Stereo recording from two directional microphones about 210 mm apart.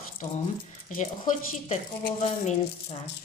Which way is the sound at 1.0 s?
35° left (ahead or behind).